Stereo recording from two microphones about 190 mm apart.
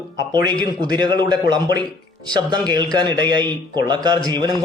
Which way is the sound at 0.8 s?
20° right (ahead or behind).